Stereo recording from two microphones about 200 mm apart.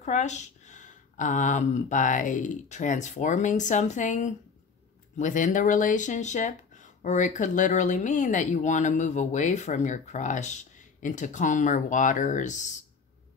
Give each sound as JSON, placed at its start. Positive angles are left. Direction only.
{"t": 0.0, "sound": "speech", "side_deg": 35}